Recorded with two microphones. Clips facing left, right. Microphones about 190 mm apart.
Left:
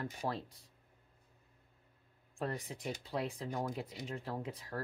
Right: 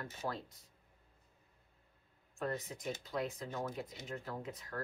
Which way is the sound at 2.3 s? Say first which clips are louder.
Even; 30° left (ahead or behind).